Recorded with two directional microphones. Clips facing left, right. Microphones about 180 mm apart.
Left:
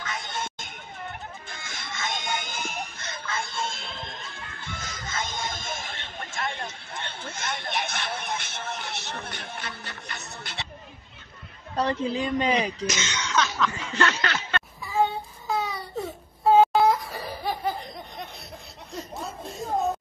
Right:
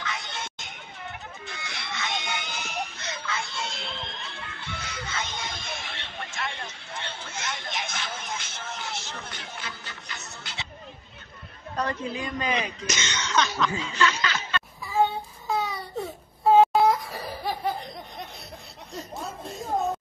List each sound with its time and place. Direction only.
0.0 s a sound: 50° left (ahead or behind)
11.7 s a woman's voice: 30° left (ahead or behind)
12.8 s speech: 5° left (ahead or behind)
13.9 s speech: 60° left (ahead or behind)
14.9 s child singing: centre (ahead or behind)
16.0 s baby cry: centre (ahead or behind)